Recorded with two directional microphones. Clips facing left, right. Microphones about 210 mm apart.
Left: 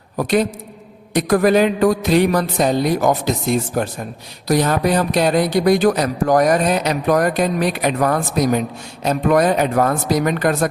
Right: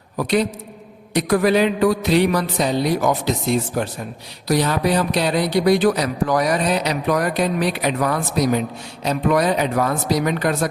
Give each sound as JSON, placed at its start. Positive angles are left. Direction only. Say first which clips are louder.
{"t": 0.2, "sound": "speech", "louder": "left 2 dB", "side_deg": 45}